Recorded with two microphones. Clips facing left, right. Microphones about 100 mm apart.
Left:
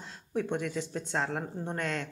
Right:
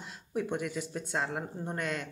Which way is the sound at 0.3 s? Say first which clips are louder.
Left 1 dB; 10° right (ahead or behind).